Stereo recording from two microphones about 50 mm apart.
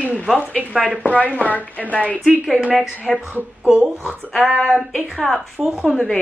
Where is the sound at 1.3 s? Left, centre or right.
Left.